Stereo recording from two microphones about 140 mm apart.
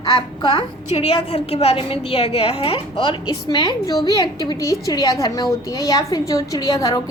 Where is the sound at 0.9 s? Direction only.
45° left (ahead or behind).